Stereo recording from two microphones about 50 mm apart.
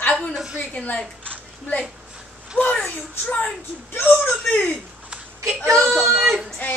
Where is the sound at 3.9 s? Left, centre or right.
Left.